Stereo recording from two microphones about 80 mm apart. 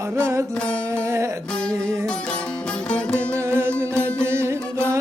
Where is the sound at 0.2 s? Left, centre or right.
Right.